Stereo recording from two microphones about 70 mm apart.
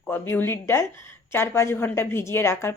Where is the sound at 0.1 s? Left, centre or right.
Left.